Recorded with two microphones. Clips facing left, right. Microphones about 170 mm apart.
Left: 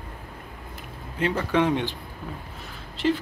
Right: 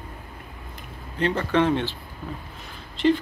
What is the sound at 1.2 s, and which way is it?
Speech, 10° left (ahead or behind).